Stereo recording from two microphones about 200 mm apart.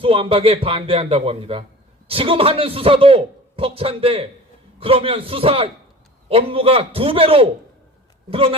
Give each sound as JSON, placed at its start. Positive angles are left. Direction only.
{"t": 0.0, "sound": "a man's voice", "side_deg": -30}